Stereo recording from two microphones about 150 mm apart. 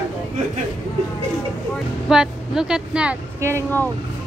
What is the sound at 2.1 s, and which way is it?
A woman's voice, 5° right (ahead or behind).